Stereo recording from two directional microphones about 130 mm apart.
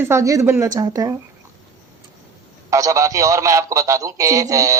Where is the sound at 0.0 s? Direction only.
20° right (ahead or behind).